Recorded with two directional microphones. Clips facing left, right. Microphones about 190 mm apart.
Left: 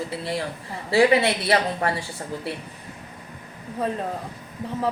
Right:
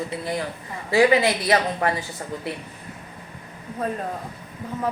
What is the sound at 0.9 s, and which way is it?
Speech, 30° left (ahead or behind).